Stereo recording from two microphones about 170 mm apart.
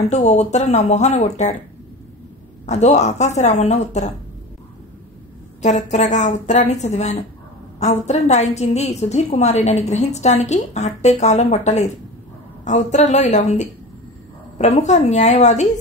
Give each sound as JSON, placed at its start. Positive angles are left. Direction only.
{"t": 0.1, "sound": "speech", "side_deg": 40}
{"t": 2.6, "sound": "a woman's voice", "side_deg": 40}
{"t": 5.6, "sound": "a woman's voice", "side_deg": 45}